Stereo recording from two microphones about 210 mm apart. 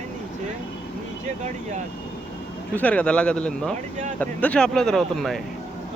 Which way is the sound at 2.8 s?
5° left (ahead or behind).